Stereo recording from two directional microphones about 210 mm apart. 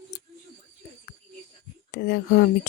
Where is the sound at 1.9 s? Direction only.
50° left (ahead or behind).